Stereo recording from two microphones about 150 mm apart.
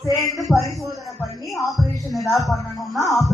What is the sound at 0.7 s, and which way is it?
Music, centre (ahead or behind).